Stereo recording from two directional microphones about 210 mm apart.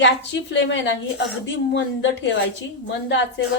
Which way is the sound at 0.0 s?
60° left (ahead or behind).